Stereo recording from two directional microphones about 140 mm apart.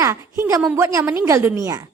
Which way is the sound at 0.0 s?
20° right (ahead or behind).